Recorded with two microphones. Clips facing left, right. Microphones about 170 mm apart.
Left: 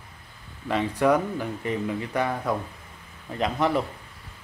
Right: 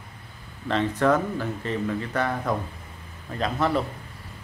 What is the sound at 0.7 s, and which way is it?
Speech, 10° left (ahead or behind).